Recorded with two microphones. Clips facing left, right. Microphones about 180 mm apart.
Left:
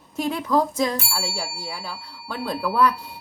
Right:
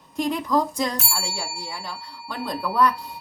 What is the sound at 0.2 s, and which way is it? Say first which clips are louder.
Speech: left 1 dB; 5° left (ahead or behind).